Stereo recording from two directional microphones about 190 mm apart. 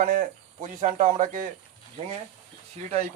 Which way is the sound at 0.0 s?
45° right (ahead or behind).